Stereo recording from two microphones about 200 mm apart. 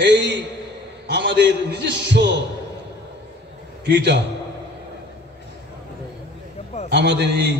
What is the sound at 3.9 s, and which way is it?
Speech, 60° right (ahead or behind).